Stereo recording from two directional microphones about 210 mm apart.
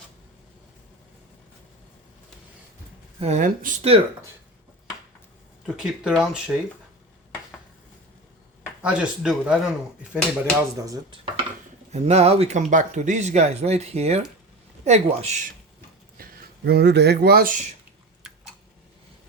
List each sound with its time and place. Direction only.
3.2 s speech: 35° right (ahead or behind)
5.6 s speech: centre (ahead or behind)
8.8 s speech: 5° right (ahead or behind)
10.8 s speech: 15° right (ahead or behind)
11.9 s speech: 30° right (ahead or behind)
16.1 s speech: 45° right (ahead or behind)